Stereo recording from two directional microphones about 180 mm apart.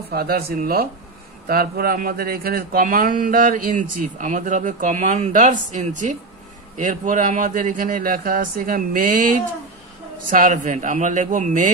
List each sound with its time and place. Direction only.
0.1 s a man's voice: 60° right (ahead or behind)